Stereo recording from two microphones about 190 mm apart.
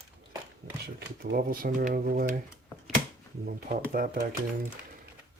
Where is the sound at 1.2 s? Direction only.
50° right (ahead or behind).